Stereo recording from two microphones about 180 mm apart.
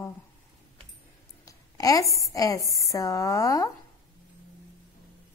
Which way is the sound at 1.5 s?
20° left (ahead or behind).